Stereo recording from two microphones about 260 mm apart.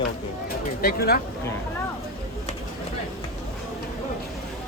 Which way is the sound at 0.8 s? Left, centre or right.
Left.